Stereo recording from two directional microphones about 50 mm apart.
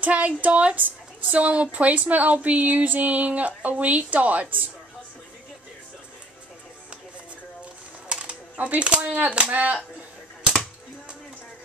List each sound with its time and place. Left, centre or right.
0.0 s a woman's voice: right
0.7 s a woman's voice: right
8.1 s typewriter: right
9.2 s a woman's voice: right